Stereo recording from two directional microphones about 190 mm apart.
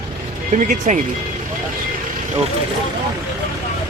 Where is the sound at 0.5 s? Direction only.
40° right (ahead or behind).